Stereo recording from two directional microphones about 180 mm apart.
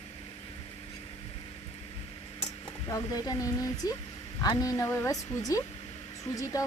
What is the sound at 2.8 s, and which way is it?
Speech, 20° left (ahead or behind).